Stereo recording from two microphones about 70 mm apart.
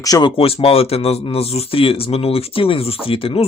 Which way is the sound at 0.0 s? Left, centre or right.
Left.